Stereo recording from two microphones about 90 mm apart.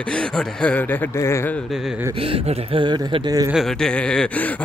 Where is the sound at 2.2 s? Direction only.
90° right; by 3.3 s 60° right (ahead or behind).